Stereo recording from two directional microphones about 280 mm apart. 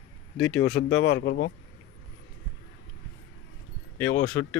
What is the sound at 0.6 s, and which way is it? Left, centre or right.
Speech, left.